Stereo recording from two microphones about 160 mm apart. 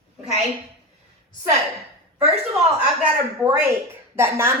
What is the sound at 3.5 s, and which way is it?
Speech, 15° right (ahead or behind).